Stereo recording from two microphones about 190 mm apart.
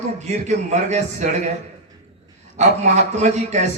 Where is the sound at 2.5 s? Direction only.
35° right (ahead or behind).